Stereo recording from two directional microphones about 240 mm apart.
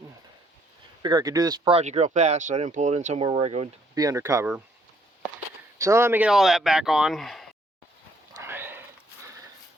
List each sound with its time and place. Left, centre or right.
1.0 s speech: centre
3.9 s speech: centre
5.8 s speech: centre
8.4 s horse: centre